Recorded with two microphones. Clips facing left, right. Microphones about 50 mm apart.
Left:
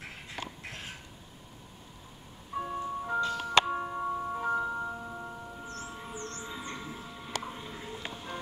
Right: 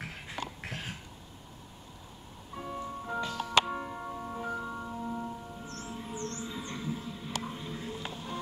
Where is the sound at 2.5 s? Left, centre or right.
Left.